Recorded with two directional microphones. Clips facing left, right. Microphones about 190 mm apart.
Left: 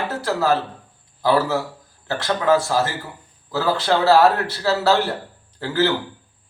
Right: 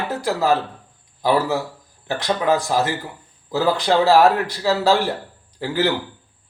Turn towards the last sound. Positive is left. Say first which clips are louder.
# even
turn(degrees=-15)  # may be behind; listen again after turning